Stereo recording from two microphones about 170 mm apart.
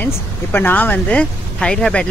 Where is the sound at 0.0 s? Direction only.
10° left (ahead or behind).